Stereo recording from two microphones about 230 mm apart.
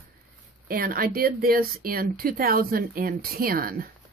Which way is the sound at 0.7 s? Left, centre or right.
Right.